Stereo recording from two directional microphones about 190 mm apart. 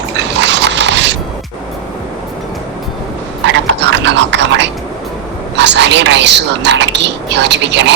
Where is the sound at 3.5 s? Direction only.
70° right (ahead or behind).